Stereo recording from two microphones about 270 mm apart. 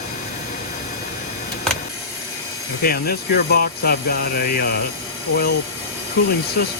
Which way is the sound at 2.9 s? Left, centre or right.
Left.